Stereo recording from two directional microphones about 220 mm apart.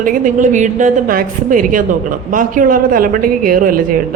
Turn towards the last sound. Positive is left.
turn(degrees=-40)  # may be behind; listen again after turning